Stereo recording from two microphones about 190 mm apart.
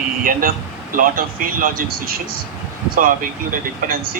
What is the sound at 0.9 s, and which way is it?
A man's voice, 45° right (ahead or behind).